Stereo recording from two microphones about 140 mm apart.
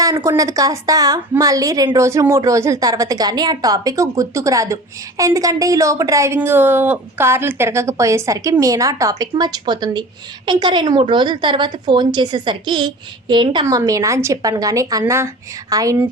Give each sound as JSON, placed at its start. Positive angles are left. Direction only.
{"t": 0.0, "sound": "a woman's voice", "side_deg": -25}